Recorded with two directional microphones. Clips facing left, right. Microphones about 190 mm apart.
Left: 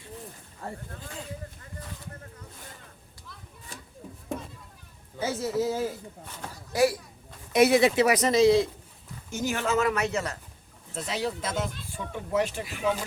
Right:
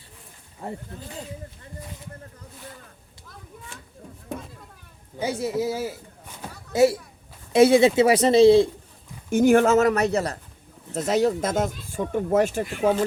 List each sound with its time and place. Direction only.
0.6 s speech: 20° right (ahead or behind)
5.2 s speech: 15° right (ahead or behind)
6.7 s speech: 25° right (ahead or behind)
9.3 s speech: 55° right (ahead or behind)